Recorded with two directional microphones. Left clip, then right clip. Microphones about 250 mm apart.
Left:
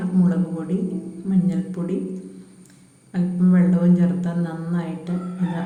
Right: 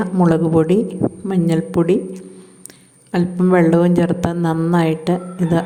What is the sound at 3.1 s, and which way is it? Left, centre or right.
A woman's voice, right.